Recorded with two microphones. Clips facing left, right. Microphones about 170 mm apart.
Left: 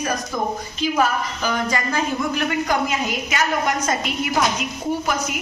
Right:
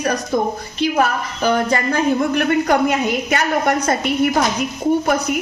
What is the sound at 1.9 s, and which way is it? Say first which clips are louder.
A woman's voice: right 6 dB; 60° right (ahead or behind).